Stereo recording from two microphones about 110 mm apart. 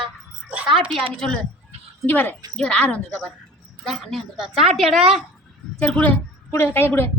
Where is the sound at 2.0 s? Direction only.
20° left (ahead or behind).